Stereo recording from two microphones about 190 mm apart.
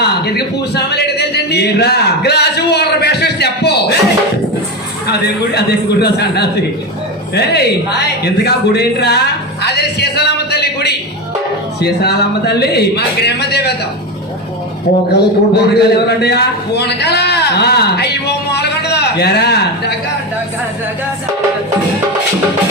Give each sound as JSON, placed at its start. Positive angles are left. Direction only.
{"t": 0.0, "sound": "a man's voice", "side_deg": 60}
{"t": 5.0, "sound": "a man's voice", "side_deg": 60}
{"t": 9.6, "sound": "a sound", "side_deg": 60}
{"t": 11.8, "sound": "a man's voice", "side_deg": 60}
{"t": 15.1, "sound": "a man's voice", "side_deg": 60}